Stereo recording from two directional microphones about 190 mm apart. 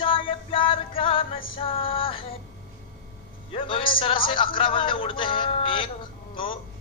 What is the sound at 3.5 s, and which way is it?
Music, 30° left (ahead or behind).